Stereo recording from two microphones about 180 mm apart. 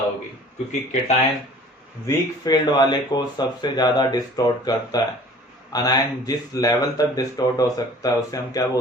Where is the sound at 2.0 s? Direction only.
20° left (ahead or behind).